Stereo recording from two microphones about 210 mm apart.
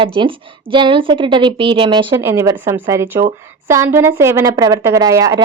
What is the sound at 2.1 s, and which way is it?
A woman's voice, 10° right (ahead or behind).